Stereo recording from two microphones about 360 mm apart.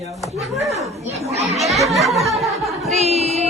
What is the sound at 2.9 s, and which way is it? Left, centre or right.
Music, centre.